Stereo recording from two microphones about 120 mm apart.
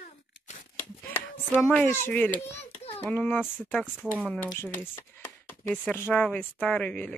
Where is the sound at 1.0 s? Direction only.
15° left (ahead or behind).